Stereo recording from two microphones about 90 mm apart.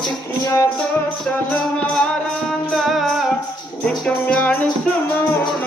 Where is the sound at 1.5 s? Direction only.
10° left (ahead or behind).